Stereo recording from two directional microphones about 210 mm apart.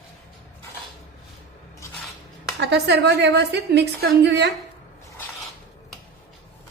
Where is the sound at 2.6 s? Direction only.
55° right (ahead or behind).